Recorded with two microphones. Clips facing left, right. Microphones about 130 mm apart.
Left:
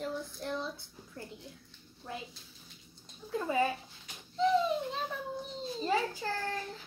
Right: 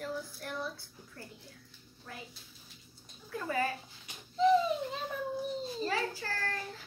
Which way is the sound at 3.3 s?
20° left (ahead or behind).